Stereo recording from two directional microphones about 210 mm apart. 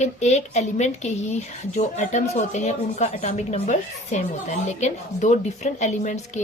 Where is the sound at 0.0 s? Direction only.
35° left (ahead or behind).